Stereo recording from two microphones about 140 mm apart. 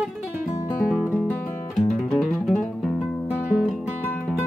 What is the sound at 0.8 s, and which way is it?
Music, 5° right (ahead or behind).